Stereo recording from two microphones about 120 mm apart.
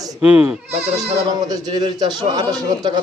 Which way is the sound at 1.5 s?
35° right (ahead or behind).